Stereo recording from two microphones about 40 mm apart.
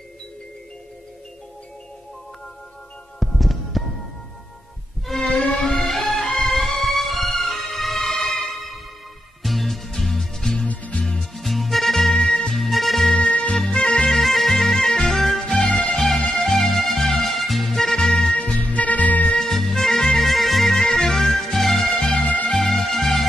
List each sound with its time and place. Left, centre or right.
3.2 s music: centre
5.1 s music: centre
10.7 s music: left
11.1 s music: centre
12.5 s music: centre
13.1 s music: centre
14.0 s music: centre
18.3 s music: left
18.7 s music: left
19.3 s music: centre